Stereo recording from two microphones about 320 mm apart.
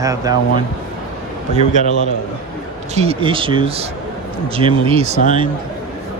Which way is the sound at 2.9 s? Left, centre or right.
Centre.